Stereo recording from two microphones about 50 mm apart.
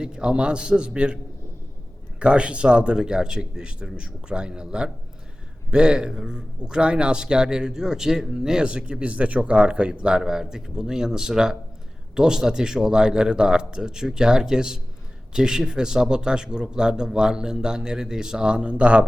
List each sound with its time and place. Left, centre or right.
0.0 s speech: centre